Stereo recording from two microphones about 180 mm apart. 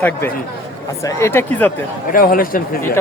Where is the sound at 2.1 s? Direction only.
50° left (ahead or behind).